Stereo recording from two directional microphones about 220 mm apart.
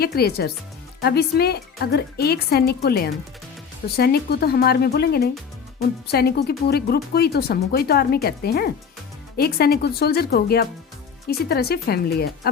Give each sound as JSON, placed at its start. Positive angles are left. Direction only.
{"t": 0.0, "sound": "speech", "side_deg": 45}